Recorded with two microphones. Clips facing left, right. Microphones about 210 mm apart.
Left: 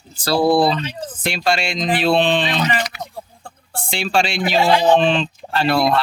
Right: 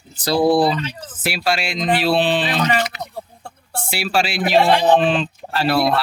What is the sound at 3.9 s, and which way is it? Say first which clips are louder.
Speech: left 1 dB; 5° right (ahead or behind).